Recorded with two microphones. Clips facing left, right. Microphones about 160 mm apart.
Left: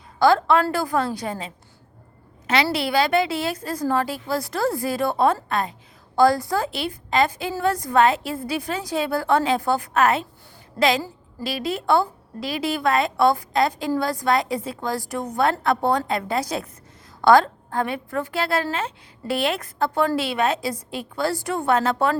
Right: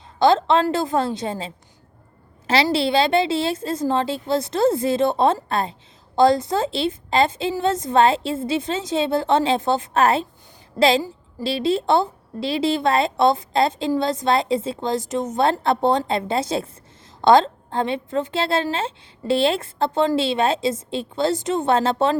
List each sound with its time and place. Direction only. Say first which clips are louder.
0.2 s a woman's voice: right 1 dB; 20° right (ahead or behind)
2.7 s a woman's voice: right 2 dB; 25° right (ahead or behind)